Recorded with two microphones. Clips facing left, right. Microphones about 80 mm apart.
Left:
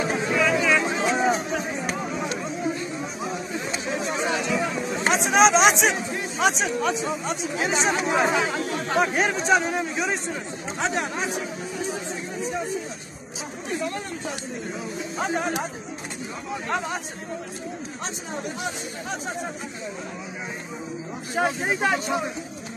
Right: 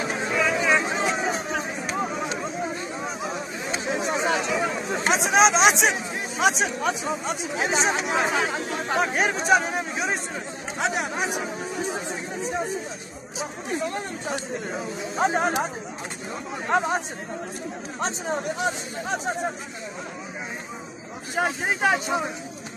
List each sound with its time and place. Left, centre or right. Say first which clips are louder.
0.2 s a sound: even; centre
0.6 s a sound: even; right
2.2 s a sound: left 1 dB; right
3.7 s chatter: right 3 dB; right
5.1 s speech: left 1 dB; centre
8.7 s speech: left 2 dB; right
9.1 s speech: even; centre
11.9 s chatter: even; right
13.7 s speech: even; right
16.7 s speech: right 6 dB; right
18.0 s speech: right 7 dB; right
21.4 s speech: left 1 dB; centre
21.9 s speech: even; centre